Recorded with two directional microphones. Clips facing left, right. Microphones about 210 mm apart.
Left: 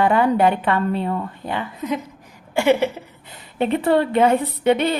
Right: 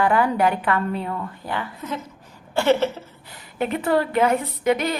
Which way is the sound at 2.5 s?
10° left (ahead or behind).